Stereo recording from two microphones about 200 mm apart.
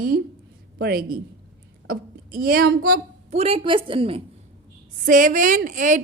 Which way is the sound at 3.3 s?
30° right (ahead or behind).